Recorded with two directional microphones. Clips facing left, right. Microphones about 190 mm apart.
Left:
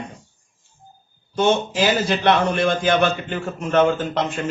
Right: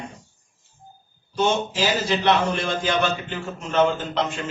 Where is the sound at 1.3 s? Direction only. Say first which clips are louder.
Left 3 dB; 55° left (ahead or behind).